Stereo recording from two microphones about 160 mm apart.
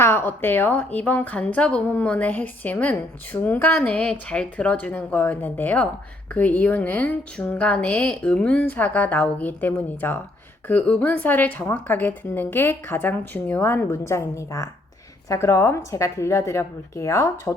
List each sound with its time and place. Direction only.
0.0 s a woman's voice: 15° left (ahead or behind)